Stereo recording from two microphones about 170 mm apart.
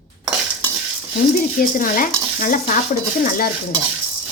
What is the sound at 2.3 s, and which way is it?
Speech, 55° left (ahead or behind).